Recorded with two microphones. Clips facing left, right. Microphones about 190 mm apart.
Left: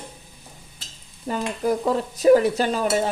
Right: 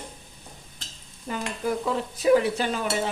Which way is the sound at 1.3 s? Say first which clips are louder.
Left 5 dB; 40° left (ahead or behind).